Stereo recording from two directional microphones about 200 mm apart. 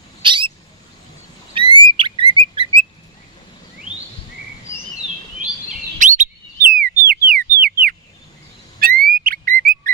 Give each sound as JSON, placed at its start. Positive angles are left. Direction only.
{"t": 0.2, "sound": "owl", "side_deg": -25}
{"t": 1.5, "sound": "bird", "side_deg": -25}
{"t": 5.9, "sound": "chirp", "side_deg": -40}
{"t": 6.6, "sound": "whistle", "side_deg": -45}
{"t": 7.1, "sound": "a sound", "side_deg": -45}